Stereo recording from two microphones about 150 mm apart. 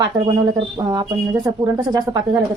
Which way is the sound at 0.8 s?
25° right (ahead or behind).